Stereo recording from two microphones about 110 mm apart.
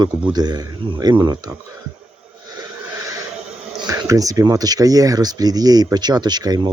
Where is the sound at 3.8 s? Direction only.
30° right (ahead or behind).